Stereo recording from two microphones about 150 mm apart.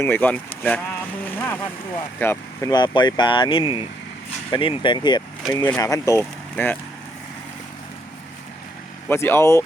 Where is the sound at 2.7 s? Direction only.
30° left (ahead or behind).